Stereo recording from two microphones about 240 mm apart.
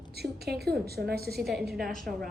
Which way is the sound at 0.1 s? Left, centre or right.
Right.